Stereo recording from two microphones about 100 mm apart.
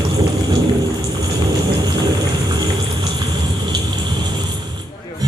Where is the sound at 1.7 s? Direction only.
40° right (ahead or behind).